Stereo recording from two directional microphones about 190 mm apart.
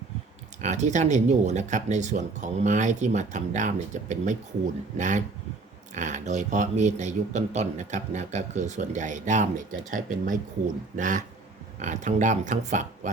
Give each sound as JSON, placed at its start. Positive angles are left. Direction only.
{"t": 0.6, "sound": "speech", "side_deg": -40}